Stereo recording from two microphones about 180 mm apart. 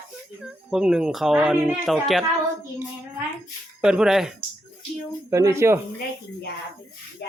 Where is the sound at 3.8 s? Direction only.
5° right (ahead or behind).